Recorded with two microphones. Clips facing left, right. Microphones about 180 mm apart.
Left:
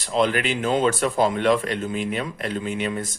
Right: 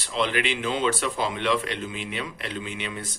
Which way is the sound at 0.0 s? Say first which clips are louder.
Left 5 dB; 45° left (ahead or behind).